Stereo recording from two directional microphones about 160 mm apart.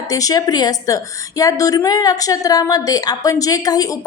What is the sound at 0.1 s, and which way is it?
A woman's voice, 20° left (ahead or behind).